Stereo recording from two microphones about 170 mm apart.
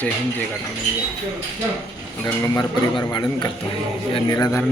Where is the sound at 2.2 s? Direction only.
25° left (ahead or behind).